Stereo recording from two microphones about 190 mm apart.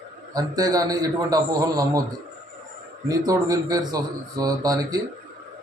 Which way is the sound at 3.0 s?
20° right (ahead or behind).